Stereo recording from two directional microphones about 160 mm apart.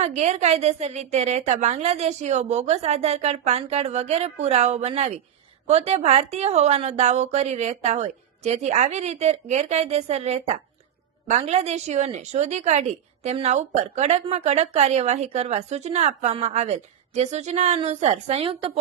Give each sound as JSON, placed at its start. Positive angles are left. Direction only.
{"t": 0.0, "sound": "a woman's voice", "side_deg": -45}